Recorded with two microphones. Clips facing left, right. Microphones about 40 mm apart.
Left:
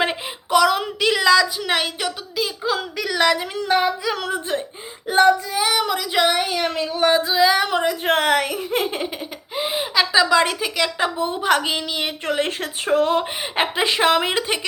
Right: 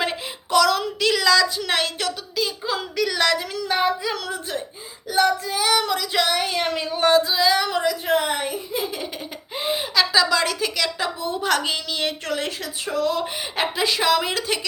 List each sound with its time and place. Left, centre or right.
0.5 s speech: centre
3.7 s a sound: centre
4.1 s a woman's voice: left
5.5 s speech: centre
6.6 s a sound: centre
7.0 s speech: centre
7.6 s speech: left
8.2 s speech: left
9.6 s a woman's voice: centre
12.5 s speech: left